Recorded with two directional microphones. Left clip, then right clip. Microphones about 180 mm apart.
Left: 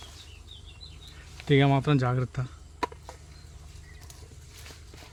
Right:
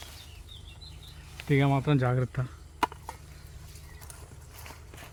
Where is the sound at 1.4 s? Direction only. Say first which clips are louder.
Left 3 dB; 40° left (ahead or behind).